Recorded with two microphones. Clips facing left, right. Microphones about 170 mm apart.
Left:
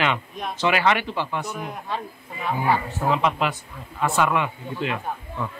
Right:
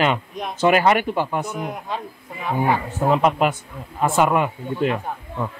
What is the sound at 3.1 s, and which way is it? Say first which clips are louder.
A man's voice: right 4 dB; 45° right (ahead or behind).